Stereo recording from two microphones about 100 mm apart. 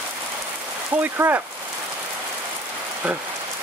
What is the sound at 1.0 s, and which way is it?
Speech, 20° right (ahead or behind).